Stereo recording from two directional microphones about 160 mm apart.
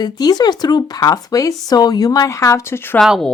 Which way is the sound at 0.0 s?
25° left (ahead or behind).